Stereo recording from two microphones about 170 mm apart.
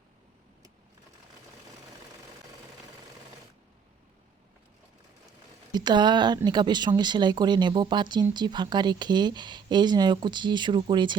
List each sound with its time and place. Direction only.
5.7 s speech: 25° right (ahead or behind)